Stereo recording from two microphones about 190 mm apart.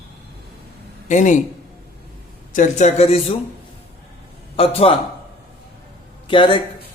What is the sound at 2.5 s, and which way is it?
Speech, 40° left (ahead or behind).